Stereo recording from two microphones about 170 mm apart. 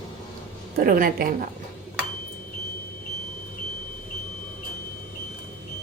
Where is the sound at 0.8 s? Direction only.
55° right (ahead or behind).